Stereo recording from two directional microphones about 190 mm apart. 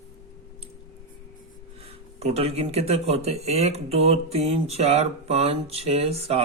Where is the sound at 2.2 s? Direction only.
35° right (ahead or behind).